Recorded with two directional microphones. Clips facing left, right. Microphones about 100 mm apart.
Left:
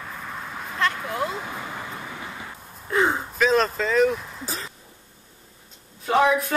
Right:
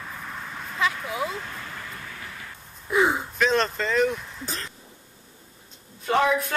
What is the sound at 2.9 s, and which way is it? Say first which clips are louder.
A woman's voice: even; 5° right (ahead or behind).